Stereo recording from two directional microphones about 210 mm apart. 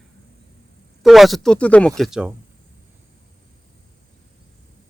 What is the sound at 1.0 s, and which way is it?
Speech, centre (ahead or behind).